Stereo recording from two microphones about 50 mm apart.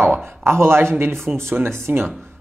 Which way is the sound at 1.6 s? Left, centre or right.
Right.